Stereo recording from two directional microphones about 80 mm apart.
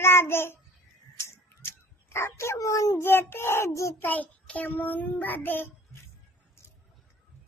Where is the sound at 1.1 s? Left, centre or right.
Left.